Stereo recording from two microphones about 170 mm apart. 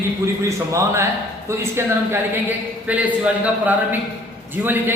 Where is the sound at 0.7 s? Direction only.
15° right (ahead or behind).